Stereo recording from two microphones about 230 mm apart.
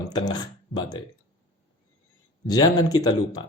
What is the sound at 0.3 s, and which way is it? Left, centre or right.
Speech, centre.